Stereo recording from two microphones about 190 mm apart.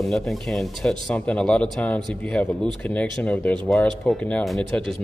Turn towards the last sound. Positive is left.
turn(degrees=5)  # may be behind; listen again after turning